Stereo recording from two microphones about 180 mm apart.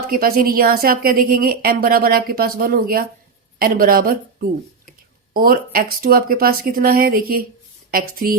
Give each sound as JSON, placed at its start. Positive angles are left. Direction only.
{"t": 0.1, "sound": "a woman's voice", "side_deg": -55}